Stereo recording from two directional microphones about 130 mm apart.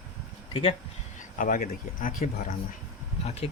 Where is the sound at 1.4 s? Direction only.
90° left.